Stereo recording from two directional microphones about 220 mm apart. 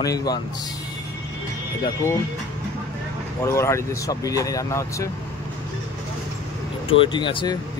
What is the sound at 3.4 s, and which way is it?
Speech, 10° left (ahead or behind).